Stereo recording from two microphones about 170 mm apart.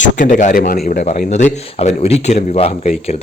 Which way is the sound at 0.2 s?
45° left (ahead or behind).